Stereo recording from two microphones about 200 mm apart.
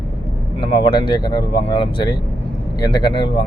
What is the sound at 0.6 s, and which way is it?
Speech, 25° left (ahead or behind).